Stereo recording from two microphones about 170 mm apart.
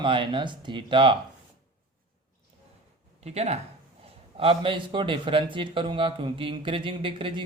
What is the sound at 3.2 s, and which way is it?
A man's voice, 40° right (ahead or behind).